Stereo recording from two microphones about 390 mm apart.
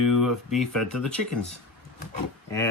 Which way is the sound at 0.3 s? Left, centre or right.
Centre.